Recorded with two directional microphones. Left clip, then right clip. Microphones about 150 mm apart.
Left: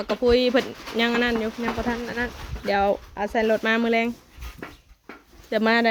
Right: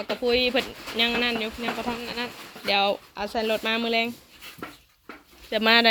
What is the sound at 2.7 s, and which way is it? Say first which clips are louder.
Speech: left 1 dB; 30° left (ahead or behind).